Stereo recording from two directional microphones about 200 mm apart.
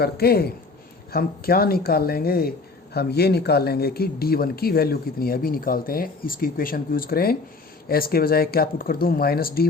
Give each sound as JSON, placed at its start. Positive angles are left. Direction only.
{"t": 0.0, "sound": "speech", "side_deg": 50}